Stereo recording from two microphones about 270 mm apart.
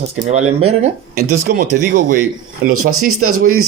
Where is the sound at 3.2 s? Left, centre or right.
Right.